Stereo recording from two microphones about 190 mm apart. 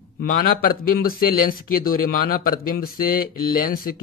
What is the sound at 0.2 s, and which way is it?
A man's voice, 50° left (ahead or behind).